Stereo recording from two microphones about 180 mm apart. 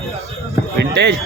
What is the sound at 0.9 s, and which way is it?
Speech, 70° right (ahead or behind).